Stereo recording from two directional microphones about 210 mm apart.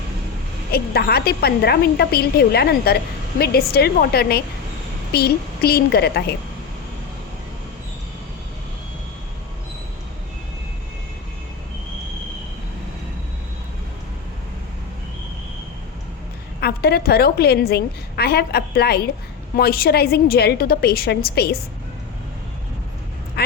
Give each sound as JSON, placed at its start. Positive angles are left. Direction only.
{"t": 0.7, "sound": "a woman's voice", "side_deg": 50}
{"t": 16.6, "sound": "a woman's voice", "side_deg": 50}